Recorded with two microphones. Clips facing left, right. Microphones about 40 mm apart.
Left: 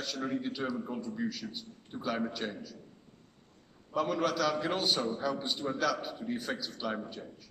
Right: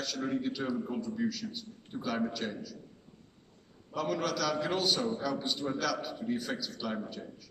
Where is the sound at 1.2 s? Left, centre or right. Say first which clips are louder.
Right 2 dB; centre.